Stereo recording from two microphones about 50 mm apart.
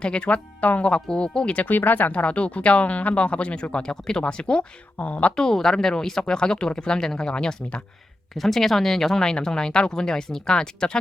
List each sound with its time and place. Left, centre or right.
0.0 s speech: centre
1.6 s speech: left; by 4.6 s centre
4.9 s speech: left
5.4 s speech: centre
8.4 s speech: centre